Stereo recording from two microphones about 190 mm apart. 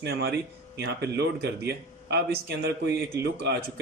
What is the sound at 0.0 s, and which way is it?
A man's voice, 55° right (ahead or behind).